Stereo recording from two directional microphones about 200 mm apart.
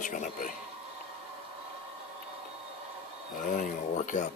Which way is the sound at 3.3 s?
40° left (ahead or behind).